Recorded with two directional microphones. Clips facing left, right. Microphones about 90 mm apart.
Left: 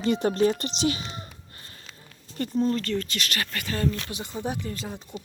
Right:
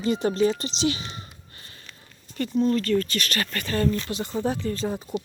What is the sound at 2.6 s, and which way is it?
Speech, 20° left (ahead or behind).